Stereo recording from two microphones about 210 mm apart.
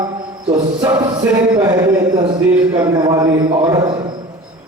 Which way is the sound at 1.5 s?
15° right (ahead or behind).